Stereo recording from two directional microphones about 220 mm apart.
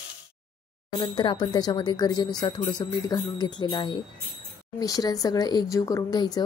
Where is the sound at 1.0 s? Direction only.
20° left (ahead or behind).